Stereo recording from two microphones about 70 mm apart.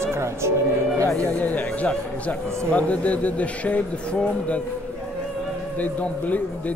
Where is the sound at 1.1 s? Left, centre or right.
Centre.